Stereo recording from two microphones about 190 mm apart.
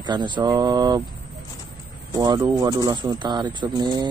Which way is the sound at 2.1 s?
20° right (ahead or behind).